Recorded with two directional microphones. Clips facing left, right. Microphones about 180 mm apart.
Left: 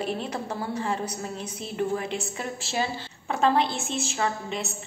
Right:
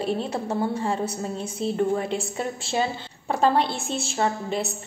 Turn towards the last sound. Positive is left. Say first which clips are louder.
# right 4 dB
turn(degrees=-35)  # may be behind; listen again after turning